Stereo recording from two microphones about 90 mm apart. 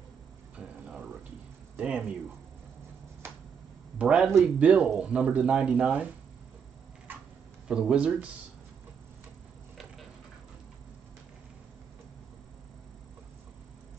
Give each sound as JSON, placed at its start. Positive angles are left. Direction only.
{"t": 0.6, "sound": "a sound", "side_deg": -10}
{"t": 1.8, "sound": "speech", "side_deg": -10}
{"t": 4.0, "sound": "speech", "side_deg": -10}
{"t": 7.1, "sound": "tick-tock", "side_deg": -20}
{"t": 7.6, "sound": "speech", "side_deg": -10}